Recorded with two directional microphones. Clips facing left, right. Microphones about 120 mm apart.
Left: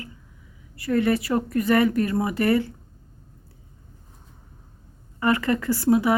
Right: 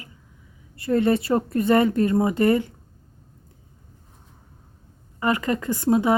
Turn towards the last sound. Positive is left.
turn(degrees=-25)  # may be behind; listen again after turning